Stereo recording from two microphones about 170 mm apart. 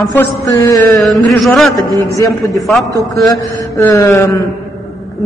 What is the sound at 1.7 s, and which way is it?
Speech, 20° left (ahead or behind).